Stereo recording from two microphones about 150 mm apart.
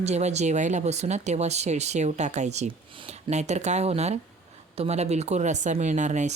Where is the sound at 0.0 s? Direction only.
50° right (ahead or behind).